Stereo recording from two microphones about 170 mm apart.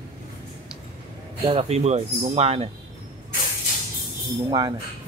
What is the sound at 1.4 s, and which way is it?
Speech, 35° right (ahead or behind).